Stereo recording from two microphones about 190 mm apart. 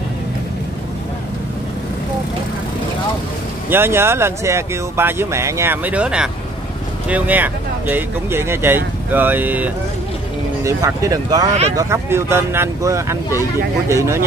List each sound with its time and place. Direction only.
3.7 s speech: 10° right (ahead or behind)